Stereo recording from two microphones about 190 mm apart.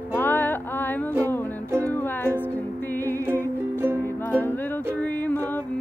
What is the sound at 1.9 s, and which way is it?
Music, 10° left (ahead or behind).